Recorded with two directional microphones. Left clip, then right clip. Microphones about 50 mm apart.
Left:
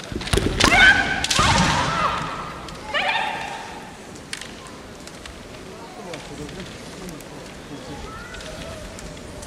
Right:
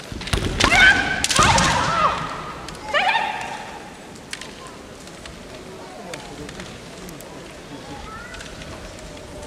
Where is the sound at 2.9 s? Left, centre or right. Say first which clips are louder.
Right 3 dB; right.